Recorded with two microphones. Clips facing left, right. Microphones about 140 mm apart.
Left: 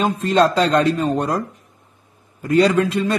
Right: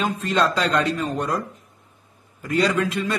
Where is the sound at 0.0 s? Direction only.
35° left (ahead or behind).